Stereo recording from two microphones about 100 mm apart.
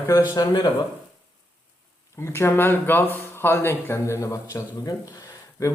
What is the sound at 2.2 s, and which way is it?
Speech, 25° left (ahead or behind).